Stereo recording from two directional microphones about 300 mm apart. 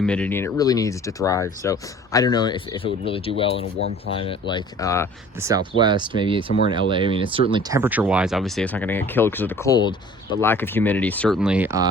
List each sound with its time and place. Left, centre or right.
0.0 s speech: centre
5.4 s speech: centre